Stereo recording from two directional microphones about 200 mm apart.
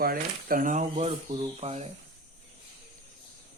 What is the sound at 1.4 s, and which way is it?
Speech, 35° right (ahead or behind).